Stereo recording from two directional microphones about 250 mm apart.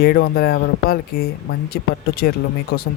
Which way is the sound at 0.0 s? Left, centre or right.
Left.